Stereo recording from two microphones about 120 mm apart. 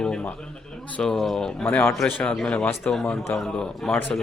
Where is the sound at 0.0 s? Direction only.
10° left (ahead or behind).